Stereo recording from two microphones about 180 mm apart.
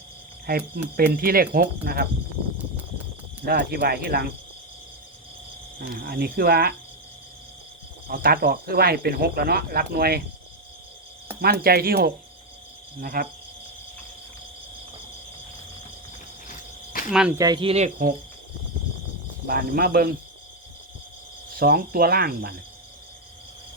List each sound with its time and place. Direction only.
0.4 s speech: 55° right (ahead or behind)
3.4 s speech: 60° right (ahead or behind)
5.9 s speech: 55° right (ahead or behind)
8.0 s speech: 55° right (ahead or behind)
11.3 s speech: 60° right (ahead or behind)
13.0 s cricket: 50° right (ahead or behind)
17.1 s speech: 5° right (ahead or behind)
17.3 s speech: 20° right (ahead or behind); by 18.1 s 45° right (ahead or behind)
19.5 s speech: 55° right (ahead or behind)
21.6 s speech: 55° right (ahead or behind)